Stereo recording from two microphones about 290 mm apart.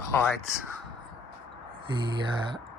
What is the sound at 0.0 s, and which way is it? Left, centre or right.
Crow, centre.